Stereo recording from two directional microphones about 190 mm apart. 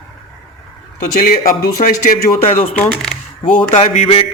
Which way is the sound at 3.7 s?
35° left (ahead or behind).